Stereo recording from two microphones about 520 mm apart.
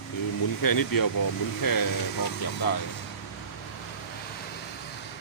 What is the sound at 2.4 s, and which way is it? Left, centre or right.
Speech, left.